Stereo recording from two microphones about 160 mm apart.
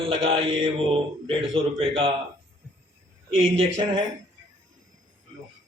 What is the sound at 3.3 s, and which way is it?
Speech, 35° right (ahead or behind).